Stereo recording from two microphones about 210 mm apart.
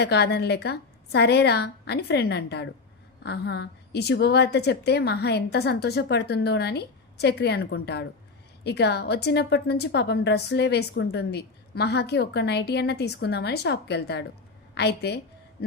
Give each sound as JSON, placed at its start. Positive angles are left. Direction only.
{"t": 0.0, "sound": "a woman's voice", "side_deg": 50}